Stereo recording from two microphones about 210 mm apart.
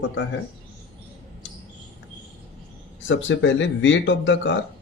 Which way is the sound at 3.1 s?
65° left (ahead or behind).